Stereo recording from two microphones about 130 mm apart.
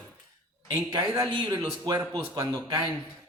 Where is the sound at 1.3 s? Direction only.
35° right (ahead or behind).